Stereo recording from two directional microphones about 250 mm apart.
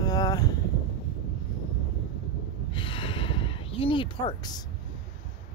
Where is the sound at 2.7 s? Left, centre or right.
Left.